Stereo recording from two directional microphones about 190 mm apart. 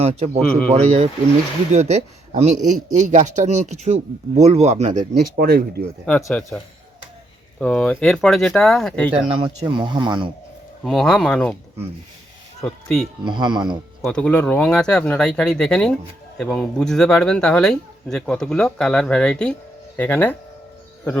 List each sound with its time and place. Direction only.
0.0 s speech: 35° right (ahead or behind)
0.3 s speech: 5° left (ahead or behind)
0.7 s speech: 30° right (ahead or behind)
5.4 s speech: 55° right (ahead or behind)
6.2 s speech: 5° left (ahead or behind)
7.6 s speech: 5° left (ahead or behind)
9.6 s speech: 25° right (ahead or behind)
10.8 s speech: centre (ahead or behind)
12.6 s speech: 5° left (ahead or behind)
13.2 s speech: 25° right (ahead or behind)
14.0 s speech: 5° left (ahead or behind)